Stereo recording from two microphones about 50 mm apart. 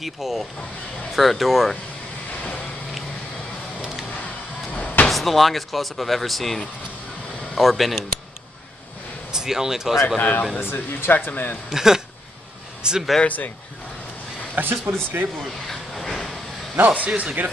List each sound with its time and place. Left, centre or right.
0.0 s speech: centre
2.4 s vehicle: left
4.7 s slam: left
5.1 s speech: centre
9.3 s speech: centre
10.0 s speech: left
10.6 s speech: left
11.7 s speech: centre
13.2 s speech: left
14.5 s speech: right
15.7 s vehicle: centre
16.7 s speech: right